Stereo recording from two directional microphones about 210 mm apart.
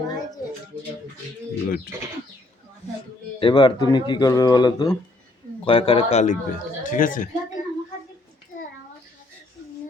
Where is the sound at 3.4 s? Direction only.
25° left (ahead or behind); by 7.6 s 40° left (ahead or behind).